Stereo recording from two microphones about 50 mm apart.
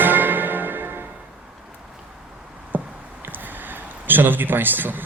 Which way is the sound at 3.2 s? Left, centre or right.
Right.